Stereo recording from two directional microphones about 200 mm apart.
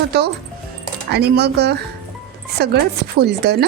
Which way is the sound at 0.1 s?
55° right (ahead or behind).